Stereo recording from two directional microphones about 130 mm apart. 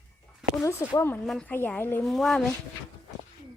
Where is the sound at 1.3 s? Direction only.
5° left (ahead or behind).